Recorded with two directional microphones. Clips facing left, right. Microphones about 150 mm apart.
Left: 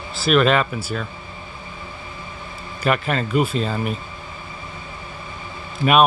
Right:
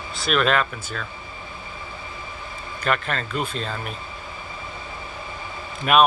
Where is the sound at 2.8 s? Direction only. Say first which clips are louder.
Left 4 dB; 5° left (ahead or behind).